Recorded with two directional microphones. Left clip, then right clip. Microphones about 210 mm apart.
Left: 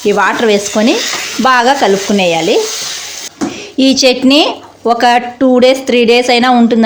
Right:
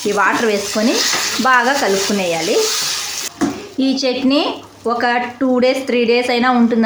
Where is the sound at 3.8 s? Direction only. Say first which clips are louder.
Left 9 dB; 35° left (ahead or behind).